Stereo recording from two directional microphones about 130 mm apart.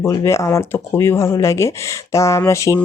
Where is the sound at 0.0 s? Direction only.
25° left (ahead or behind).